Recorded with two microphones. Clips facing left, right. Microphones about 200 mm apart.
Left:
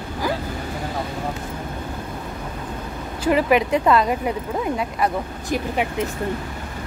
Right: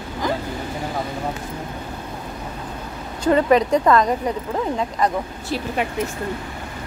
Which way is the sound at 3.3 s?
15° left (ahead or behind).